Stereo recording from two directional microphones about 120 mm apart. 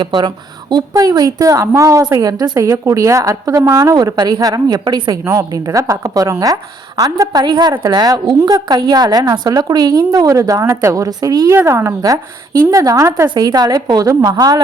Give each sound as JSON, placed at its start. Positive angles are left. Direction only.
{"t": 0.0, "sound": "a woman's voice", "side_deg": -40}
{"t": 5.2, "sound": "a woman's voice", "side_deg": -30}